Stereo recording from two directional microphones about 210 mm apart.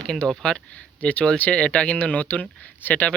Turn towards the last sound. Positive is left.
turn(degrees=5)  # may be behind; listen again after turning